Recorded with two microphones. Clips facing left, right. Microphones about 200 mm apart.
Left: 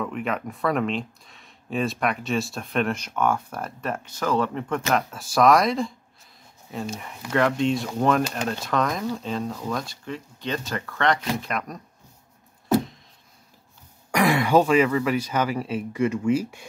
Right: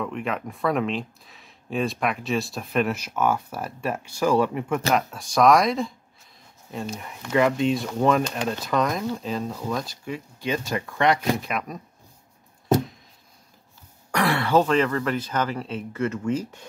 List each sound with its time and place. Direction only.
0.0 s speech: centre (ahead or behind)
4.9 s speech: centre (ahead or behind)
14.1 s speech: 15° left (ahead or behind)